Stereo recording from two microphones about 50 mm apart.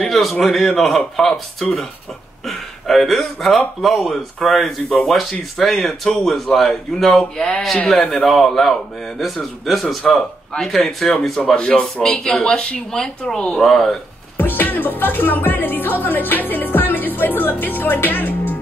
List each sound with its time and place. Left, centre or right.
0.0 s a man's voice: centre
11.5 s speech: centre
14.3 s music: left